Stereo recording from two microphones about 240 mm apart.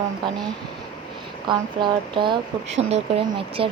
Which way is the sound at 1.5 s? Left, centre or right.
Centre.